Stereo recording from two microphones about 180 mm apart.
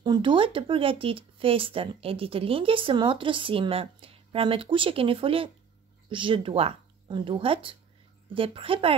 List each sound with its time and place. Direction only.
0.0 s a woman's voice: 25° right (ahead or behind)